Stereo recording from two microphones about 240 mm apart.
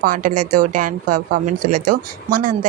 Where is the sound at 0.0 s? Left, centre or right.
Right.